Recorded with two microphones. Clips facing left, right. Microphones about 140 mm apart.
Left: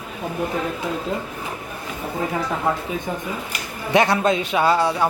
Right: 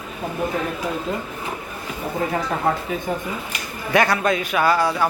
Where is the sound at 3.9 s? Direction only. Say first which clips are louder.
Left 1 dB; 25° left (ahead or behind).